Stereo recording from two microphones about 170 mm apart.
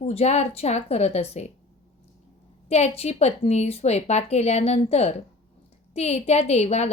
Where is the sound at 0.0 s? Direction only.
40° left (ahead or behind).